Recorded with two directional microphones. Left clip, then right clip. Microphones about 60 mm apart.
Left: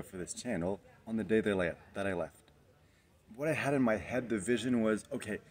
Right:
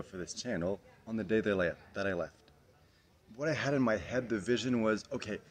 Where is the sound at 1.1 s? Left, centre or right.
Right.